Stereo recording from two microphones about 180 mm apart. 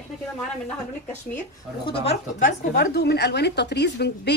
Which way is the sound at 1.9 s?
40° left (ahead or behind).